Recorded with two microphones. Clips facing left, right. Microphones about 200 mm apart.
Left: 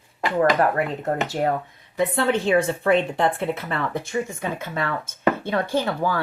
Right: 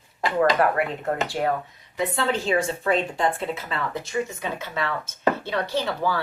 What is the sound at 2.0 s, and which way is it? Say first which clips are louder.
A woman's voice: left 4 dB; 55° left (ahead or behind).